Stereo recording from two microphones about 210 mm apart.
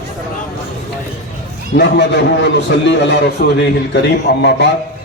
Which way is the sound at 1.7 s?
55° left (ahead or behind).